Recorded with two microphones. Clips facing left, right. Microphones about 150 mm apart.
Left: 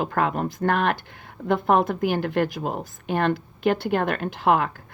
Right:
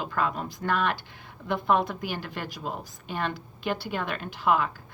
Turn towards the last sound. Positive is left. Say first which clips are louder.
# left 4 dB
turn(degrees=55)  # may be behind; listen again after turning